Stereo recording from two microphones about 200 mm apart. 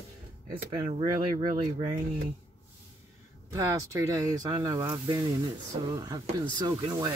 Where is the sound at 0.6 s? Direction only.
25° right (ahead or behind).